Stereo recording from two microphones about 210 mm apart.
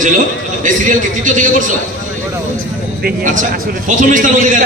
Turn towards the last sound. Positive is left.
turn(degrees=-40)  # may be behind; listen again after turning